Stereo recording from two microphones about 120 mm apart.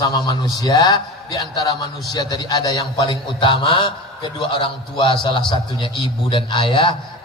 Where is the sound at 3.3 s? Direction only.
50° left (ahead or behind).